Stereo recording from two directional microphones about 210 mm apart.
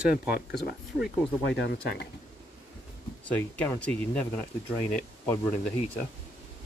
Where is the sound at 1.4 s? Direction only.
55° left (ahead or behind).